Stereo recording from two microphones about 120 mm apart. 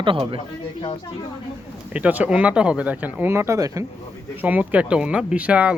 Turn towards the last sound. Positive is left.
turn(degrees=-10)  # may be behind; listen again after turning